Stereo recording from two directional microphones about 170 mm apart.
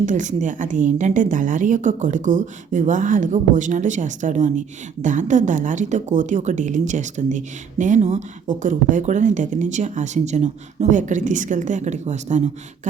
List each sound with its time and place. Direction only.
0.0 s a woman's voice: 45° right (ahead or behind)